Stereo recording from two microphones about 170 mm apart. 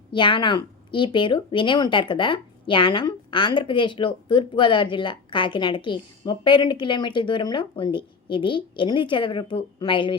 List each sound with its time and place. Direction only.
0.1 s speech: 30° left (ahead or behind)